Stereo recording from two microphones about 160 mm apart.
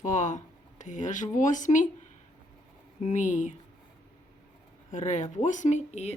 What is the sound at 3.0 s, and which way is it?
Speech, 50° left (ahead or behind).